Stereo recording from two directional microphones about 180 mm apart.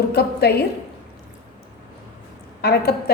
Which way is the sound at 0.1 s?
60° left (ahead or behind).